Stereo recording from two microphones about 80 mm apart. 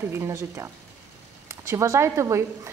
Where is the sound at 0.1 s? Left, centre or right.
Right.